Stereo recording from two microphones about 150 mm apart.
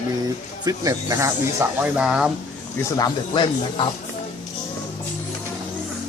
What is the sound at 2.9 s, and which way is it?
Speech, 30° left (ahead or behind).